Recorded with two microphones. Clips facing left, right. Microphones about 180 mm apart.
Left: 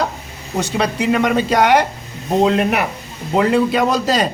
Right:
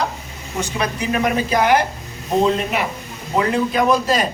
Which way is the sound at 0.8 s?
80° left.